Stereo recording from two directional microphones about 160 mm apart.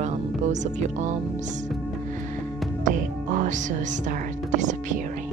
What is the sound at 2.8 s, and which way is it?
Speech, 55° right (ahead or behind).